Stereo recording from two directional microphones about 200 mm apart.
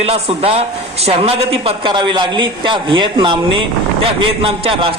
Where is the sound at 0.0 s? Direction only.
30° right (ahead or behind).